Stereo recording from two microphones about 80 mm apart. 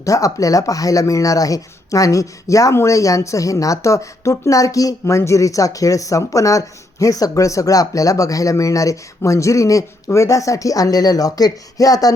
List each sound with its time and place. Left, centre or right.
0.0 s speech: left